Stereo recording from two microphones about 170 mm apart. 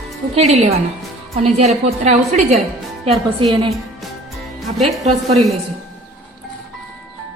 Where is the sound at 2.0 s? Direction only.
45° right (ahead or behind).